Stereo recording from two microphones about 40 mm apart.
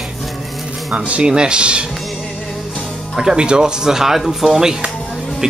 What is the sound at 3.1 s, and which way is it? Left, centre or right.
Speech, centre.